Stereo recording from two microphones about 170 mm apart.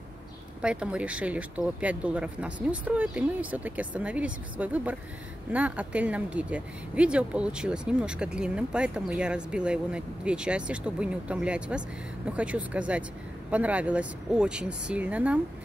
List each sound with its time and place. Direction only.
0.6 s speech: 5° right (ahead or behind)